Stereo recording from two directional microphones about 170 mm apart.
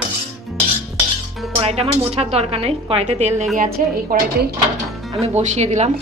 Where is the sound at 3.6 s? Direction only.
55° right (ahead or behind).